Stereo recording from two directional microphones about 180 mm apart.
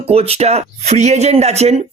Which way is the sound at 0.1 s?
35° right (ahead or behind).